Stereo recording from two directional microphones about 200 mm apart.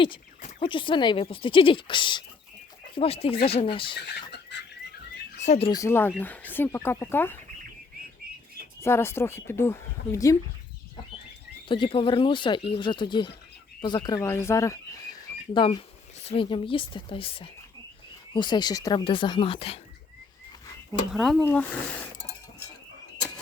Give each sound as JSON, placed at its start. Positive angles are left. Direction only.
{"t": 0.6, "sound": "speech", "side_deg": 25}
{"t": 3.9, "sound": "chicken", "side_deg": 60}
{"t": 5.5, "sound": "speech", "side_deg": 30}
{"t": 5.7, "sound": "speech", "side_deg": 15}
{"t": 8.8, "sound": "speech", "side_deg": 10}
{"t": 11.7, "sound": "speech", "side_deg": 25}
{"t": 21.1, "sound": "speech", "side_deg": 0}